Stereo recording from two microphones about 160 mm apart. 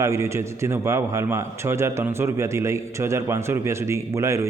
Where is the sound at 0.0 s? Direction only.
20° right (ahead or behind).